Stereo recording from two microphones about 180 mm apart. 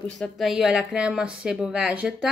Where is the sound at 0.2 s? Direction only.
Centre (ahead or behind).